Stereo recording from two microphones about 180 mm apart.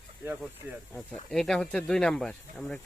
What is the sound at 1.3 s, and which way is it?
Speech, 5° left (ahead or behind).